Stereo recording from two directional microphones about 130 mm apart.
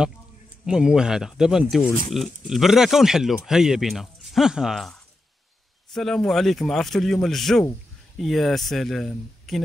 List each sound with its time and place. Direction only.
0.7 s speech: 5° right (ahead or behind)